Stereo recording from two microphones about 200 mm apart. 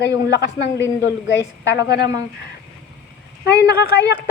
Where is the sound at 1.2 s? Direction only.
65° left (ahead or behind).